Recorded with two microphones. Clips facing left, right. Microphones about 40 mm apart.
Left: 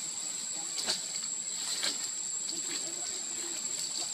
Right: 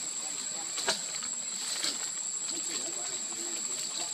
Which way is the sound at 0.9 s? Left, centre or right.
Right.